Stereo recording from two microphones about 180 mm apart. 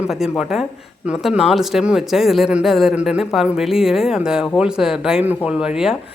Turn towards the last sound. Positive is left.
turn(degrees=-5)  # may be behind; listen again after turning